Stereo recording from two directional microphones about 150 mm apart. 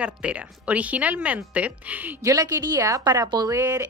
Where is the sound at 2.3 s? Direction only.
25° right (ahead or behind).